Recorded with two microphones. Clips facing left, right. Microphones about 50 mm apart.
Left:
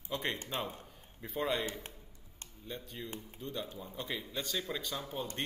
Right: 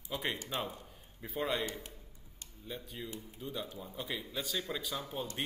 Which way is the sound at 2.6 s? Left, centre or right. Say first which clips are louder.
Even; centre.